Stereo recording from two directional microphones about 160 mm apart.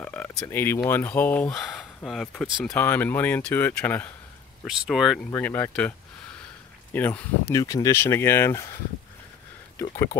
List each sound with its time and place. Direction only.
0.0 s speech: 5° left (ahead or behind)
4.6 s speech: 5° right (ahead or behind)
5.3 s speech: 15° left (ahead or behind)
7.5 s speech: 20° left (ahead or behind)